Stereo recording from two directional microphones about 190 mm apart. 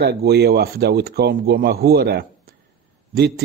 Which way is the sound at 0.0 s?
55° right (ahead or behind).